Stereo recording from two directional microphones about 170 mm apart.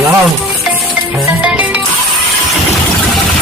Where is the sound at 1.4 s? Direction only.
5° right (ahead or behind).